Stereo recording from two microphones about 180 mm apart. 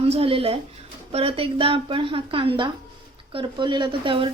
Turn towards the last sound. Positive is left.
turn(degrees=-30)  # may be behind; listen again after turning